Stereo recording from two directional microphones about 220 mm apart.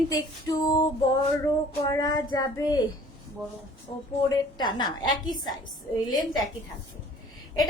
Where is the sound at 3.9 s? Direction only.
20° left (ahead or behind).